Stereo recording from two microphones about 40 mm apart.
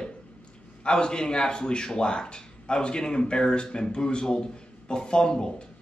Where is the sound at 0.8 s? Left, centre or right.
Centre.